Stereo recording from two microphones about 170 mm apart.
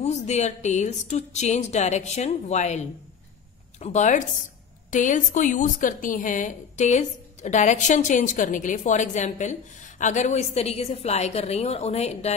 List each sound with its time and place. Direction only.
0.0 s a woman's voice: 40° left (ahead or behind)